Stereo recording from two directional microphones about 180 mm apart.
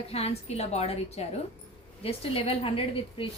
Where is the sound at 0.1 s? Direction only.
35° left (ahead or behind).